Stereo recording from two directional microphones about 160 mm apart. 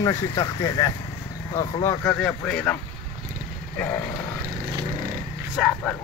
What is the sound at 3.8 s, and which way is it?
Speech, 10° left (ahead or behind).